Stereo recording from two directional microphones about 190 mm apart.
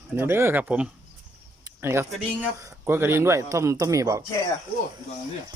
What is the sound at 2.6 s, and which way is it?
Speech, 10° right (ahead or behind).